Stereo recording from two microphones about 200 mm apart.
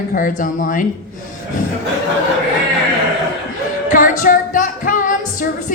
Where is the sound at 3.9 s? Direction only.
40° left (ahead or behind).